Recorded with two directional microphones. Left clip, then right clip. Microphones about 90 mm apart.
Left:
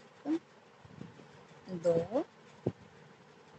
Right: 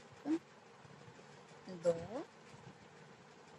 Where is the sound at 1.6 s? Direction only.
30° left (ahead or behind).